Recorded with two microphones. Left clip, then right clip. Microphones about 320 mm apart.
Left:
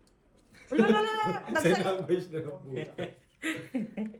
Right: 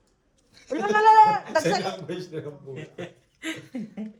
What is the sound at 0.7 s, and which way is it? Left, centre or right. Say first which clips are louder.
Speech: right 8 dB; right.